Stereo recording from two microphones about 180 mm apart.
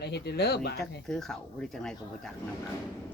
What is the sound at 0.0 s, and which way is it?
Speech, 65° left (ahead or behind).